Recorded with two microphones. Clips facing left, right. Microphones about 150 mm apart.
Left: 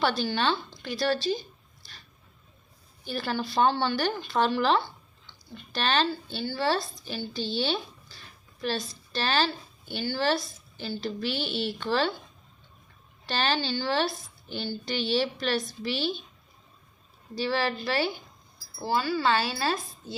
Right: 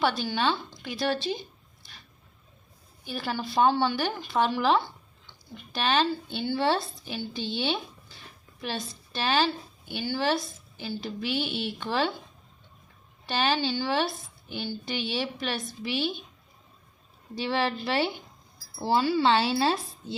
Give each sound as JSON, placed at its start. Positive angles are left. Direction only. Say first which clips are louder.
{"t": 0.3, "sound": "speech", "louder": "even", "side_deg": -10}
{"t": 3.0, "sound": "speech", "louder": "left 1 dB", "side_deg": -10}
{"t": 13.2, "sound": "speech", "louder": "right 2 dB", "side_deg": -10}
{"t": 17.4, "sound": "speech", "louder": "even", "side_deg": -20}